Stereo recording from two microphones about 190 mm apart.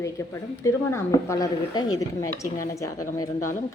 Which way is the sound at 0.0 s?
15° left (ahead or behind).